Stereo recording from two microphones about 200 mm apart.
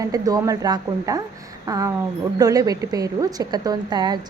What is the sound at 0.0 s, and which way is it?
A woman's voice, 20° right (ahead or behind).